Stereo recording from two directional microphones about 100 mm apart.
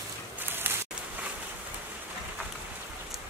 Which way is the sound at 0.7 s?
20° right (ahead or behind).